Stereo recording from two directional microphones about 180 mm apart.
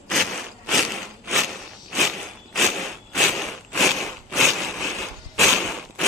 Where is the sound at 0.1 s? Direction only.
Centre (ahead or behind).